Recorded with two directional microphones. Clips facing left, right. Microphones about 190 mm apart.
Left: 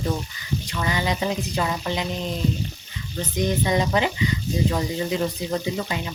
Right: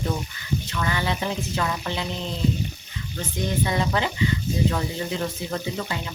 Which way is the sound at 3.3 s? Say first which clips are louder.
Left 3 dB; 20° left (ahead or behind).